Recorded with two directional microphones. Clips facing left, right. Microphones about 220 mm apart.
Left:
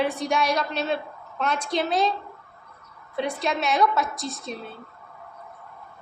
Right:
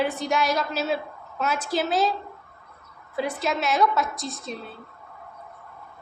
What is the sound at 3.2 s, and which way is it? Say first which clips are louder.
A woman's voice: even; centre (ahead or behind).